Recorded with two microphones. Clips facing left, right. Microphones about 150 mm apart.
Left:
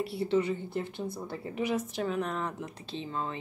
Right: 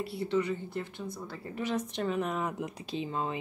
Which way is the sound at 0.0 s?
25° left (ahead or behind).